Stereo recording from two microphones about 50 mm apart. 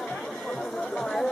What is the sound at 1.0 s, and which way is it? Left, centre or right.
Chatter, centre.